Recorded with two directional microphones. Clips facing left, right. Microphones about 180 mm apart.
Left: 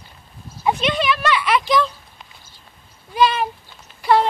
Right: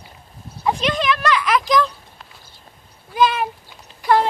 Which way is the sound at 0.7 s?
5° left (ahead or behind).